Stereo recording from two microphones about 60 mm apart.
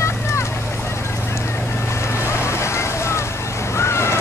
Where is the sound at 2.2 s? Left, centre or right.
Left.